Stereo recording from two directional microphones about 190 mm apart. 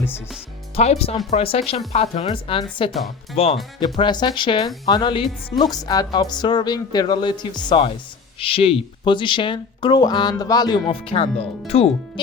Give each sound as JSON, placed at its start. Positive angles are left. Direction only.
{"t": 0.8, "sound": "speech", "side_deg": 30}